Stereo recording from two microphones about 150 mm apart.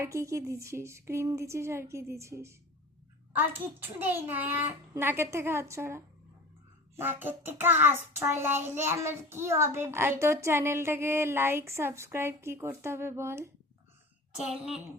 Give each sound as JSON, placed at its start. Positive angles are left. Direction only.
{"t": 0.0, "sound": "a woman's voice", "side_deg": -20}
{"t": 3.3, "sound": "child singing", "side_deg": -15}